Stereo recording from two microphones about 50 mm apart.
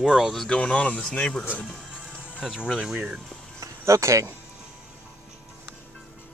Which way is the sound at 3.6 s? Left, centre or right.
Right.